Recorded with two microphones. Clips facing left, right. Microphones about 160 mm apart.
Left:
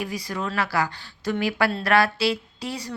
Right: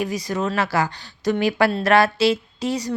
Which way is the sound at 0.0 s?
20° right (ahead or behind).